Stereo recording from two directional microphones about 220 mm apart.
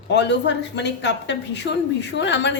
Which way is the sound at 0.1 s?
50° left (ahead or behind).